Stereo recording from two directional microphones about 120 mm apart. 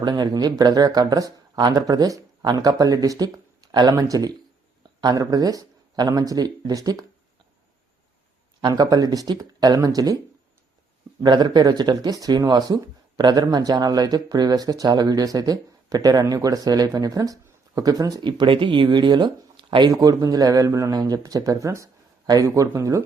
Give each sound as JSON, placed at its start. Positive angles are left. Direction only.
{"t": 0.0, "sound": "speech", "side_deg": -40}
{"t": 8.6, "sound": "speech", "side_deg": -35}
{"t": 11.2, "sound": "speech", "side_deg": -40}
{"t": 18.2, "sound": "speech", "side_deg": -40}
{"t": 19.9, "sound": "speech", "side_deg": -30}